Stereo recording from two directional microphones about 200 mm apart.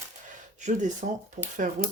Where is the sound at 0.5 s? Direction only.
35° right (ahead or behind).